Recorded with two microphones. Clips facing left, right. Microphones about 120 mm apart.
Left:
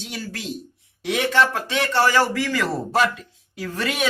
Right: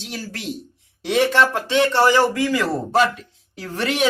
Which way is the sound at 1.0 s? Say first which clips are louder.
Right 3 dB; 30° right (ahead or behind).